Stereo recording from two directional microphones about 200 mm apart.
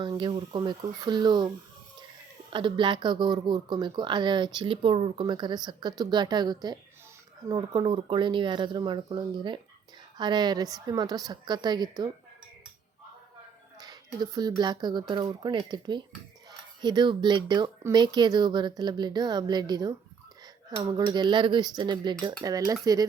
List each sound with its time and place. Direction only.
0.0 s speech: 25° right (ahead or behind)
13.7 s a sound: 20° right (ahead or behind)
14.6 s speech: 20° right (ahead or behind)